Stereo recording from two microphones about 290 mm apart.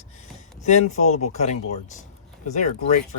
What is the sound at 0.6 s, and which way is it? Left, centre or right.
Speech, left.